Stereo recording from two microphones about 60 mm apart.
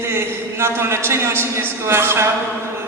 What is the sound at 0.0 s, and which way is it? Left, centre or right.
A man's voice, right.